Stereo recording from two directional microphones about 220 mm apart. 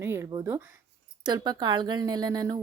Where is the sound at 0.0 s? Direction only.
15° right (ahead or behind).